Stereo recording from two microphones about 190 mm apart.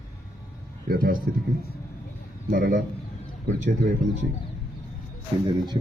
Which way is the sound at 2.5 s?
45° right (ahead or behind).